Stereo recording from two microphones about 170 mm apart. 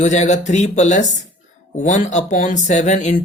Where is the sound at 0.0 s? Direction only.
45° left (ahead or behind).